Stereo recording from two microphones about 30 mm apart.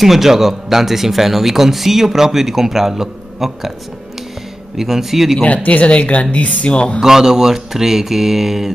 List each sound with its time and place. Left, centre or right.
0.0 s speech: centre
4.7 s speech: centre
5.4 s speech: left
6.7 s speech: left
7.0 s speech: centre